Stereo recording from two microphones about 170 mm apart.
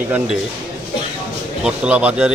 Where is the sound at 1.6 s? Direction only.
5° right (ahead or behind).